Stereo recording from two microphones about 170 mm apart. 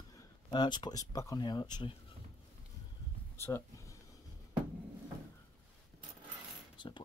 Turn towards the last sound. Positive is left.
turn(degrees=25)  # may be behind; listen again after turning